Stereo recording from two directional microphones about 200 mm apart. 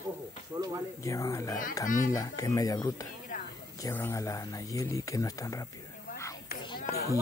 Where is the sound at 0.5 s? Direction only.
10° right (ahead or behind).